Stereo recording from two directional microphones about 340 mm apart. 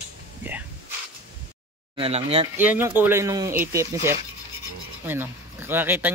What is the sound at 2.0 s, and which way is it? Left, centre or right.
Speech, centre.